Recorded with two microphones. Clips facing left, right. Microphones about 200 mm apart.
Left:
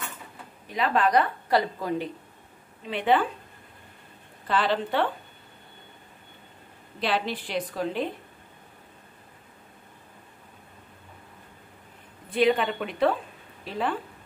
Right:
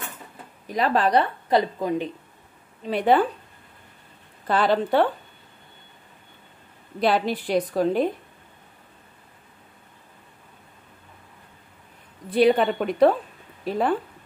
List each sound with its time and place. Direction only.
0.7 s a woman's voice: 40° right (ahead or behind)
1.5 s a woman's voice: 20° right (ahead or behind)
2.9 s a woman's voice: 40° right (ahead or behind)
4.5 s a woman's voice: 45° right (ahead or behind)
7.0 s a woman's voice: 45° right (ahead or behind)
12.3 s a woman's voice: 35° right (ahead or behind)